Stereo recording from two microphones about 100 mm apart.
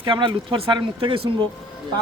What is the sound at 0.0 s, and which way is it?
A man's voice, 55° right (ahead or behind).